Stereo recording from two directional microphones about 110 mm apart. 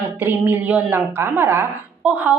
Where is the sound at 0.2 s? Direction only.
20° right (ahead or behind).